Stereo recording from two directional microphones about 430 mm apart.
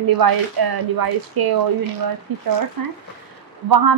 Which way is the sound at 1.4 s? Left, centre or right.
Right.